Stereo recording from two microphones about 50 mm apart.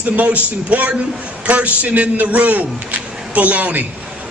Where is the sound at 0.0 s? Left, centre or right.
Right.